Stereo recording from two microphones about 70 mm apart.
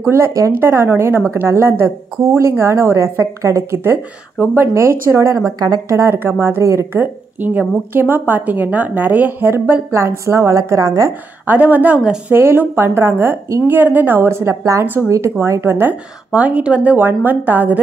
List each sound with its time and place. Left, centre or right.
0.0 s speech: right
7.0 s speech: right
10.2 s a woman's voice: right
11.4 s speech: right
16.3 s speech: centre